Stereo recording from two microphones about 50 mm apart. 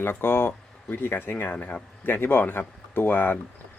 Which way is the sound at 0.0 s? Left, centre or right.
Left.